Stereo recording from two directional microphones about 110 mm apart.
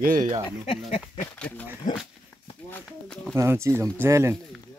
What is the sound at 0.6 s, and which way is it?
Speech, 90° left.